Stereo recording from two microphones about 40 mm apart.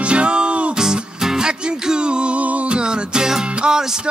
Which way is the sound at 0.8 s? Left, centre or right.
Centre.